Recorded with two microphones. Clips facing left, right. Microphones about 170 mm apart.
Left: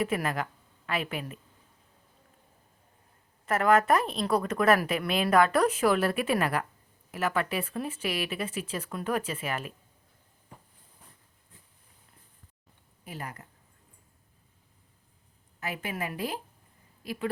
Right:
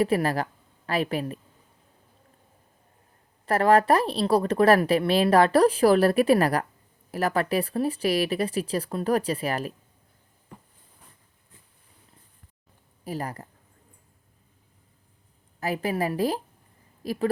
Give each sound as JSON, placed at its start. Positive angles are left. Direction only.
{"t": 0.0, "sound": "a woman's voice", "side_deg": -35}
{"t": 3.4, "sound": "a woman's voice", "side_deg": -35}
{"t": 13.1, "sound": "a woman's voice", "side_deg": -35}
{"t": 15.6, "sound": "a woman's voice", "side_deg": -35}